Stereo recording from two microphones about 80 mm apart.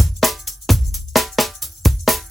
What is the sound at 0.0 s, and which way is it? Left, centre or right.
Music, centre.